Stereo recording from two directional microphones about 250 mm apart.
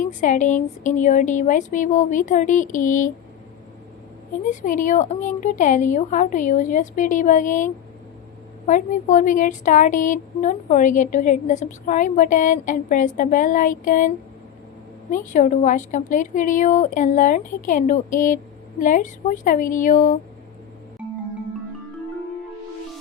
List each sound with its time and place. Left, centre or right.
0.0 s speech: left
4.4 s speech: left
15.1 s speech: left